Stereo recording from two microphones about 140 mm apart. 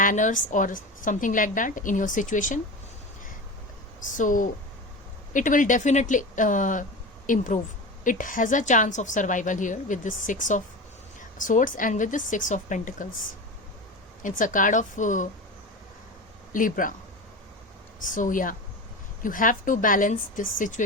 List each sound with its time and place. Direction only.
0.0 s a woman's voice: 70° left (ahead or behind)
4.2 s a woman's voice: 70° left (ahead or behind)
14.2 s a woman's voice: 70° left (ahead or behind)
16.5 s speech: 75° left (ahead or behind)
18.0 s a woman's voice: 70° left (ahead or behind)